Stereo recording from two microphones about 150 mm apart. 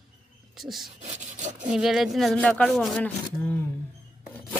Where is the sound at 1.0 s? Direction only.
55° right (ahead or behind).